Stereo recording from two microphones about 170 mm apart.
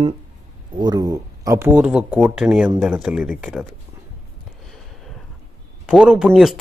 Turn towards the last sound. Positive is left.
turn(degrees=0)  # may be behind; listen again after turning